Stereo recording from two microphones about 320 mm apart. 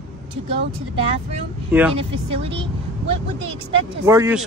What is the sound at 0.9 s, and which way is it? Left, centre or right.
Speech, centre.